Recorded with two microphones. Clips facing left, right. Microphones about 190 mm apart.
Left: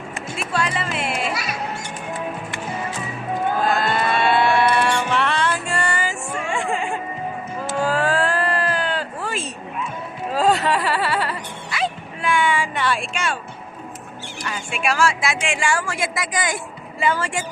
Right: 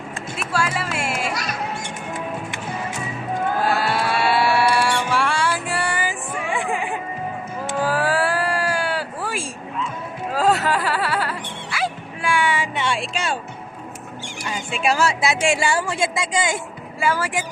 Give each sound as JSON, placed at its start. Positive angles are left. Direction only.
{"t": 0.3, "sound": "music", "side_deg": -5}
{"t": 1.3, "sound": "music", "side_deg": 5}
{"t": 3.6, "sound": "music", "side_deg": -10}
{"t": 7.8, "sound": "cat", "side_deg": -10}
{"t": 10.3, "sound": "music", "side_deg": -5}
{"t": 12.8, "sound": "a sound", "side_deg": -25}
{"t": 14.7, "sound": "a sound", "side_deg": -25}
{"t": 15.7, "sound": "speech", "side_deg": -25}
{"t": 17.0, "sound": "speech", "side_deg": -10}